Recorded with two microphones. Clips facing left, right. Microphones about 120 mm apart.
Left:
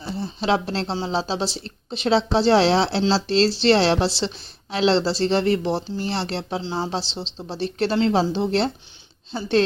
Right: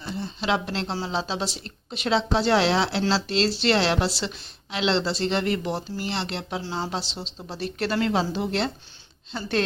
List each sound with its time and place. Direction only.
0.1 s a woman's voice: 35° left (ahead or behind)
6.6 s speech: 20° left (ahead or behind)
6.9 s speech: 30° left (ahead or behind)